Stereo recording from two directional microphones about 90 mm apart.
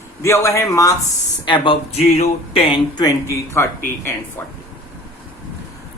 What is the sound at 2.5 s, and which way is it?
Speech, 90° left.